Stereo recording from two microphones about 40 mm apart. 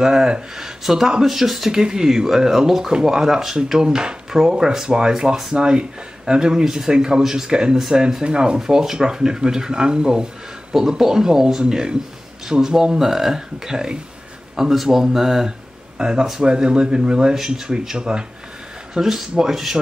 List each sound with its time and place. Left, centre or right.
0.0 s speech: centre
8.5 s speech: centre
18.9 s speech: centre